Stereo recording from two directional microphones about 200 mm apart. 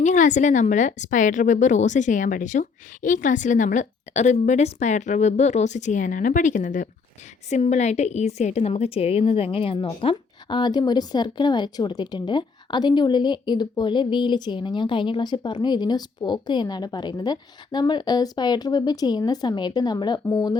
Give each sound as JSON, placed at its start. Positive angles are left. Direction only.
{"t": 0.0, "sound": "a woman's voice", "side_deg": 40}